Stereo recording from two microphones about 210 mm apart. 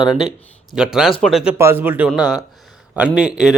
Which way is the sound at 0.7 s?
5° right (ahead or behind).